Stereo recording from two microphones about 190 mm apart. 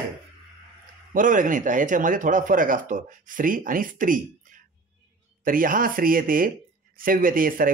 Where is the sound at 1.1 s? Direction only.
45° right (ahead or behind).